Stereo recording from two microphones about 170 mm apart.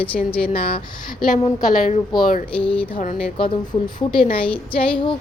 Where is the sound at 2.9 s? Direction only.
50° left (ahead or behind).